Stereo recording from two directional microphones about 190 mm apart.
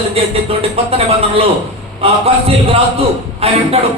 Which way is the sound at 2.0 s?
30° right (ahead or behind).